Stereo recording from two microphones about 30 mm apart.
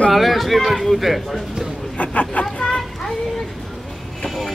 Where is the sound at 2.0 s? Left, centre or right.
Left.